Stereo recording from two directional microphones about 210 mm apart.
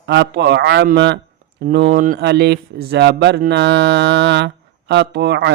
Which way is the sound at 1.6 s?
45° right (ahead or behind).